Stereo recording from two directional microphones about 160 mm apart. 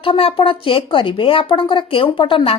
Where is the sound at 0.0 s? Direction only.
35° left (ahead or behind).